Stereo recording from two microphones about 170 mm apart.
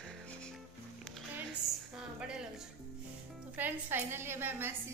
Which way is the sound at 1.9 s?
5° right (ahead or behind).